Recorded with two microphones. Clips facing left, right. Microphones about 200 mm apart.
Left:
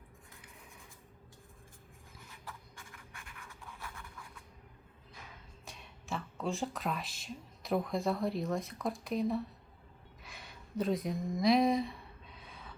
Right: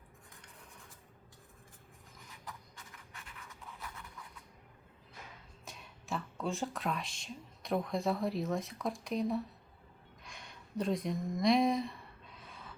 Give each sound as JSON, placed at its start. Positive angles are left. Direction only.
{"t": 2.4, "sound": "writing", "side_deg": -20}
{"t": 5.6, "sound": "speech", "side_deg": 0}
{"t": 10.2, "sound": "a sound", "side_deg": 5}